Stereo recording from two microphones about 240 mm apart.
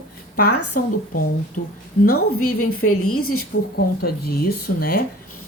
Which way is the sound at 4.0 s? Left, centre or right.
Left.